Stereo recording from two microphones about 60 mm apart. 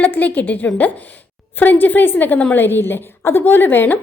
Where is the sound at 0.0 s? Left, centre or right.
Left.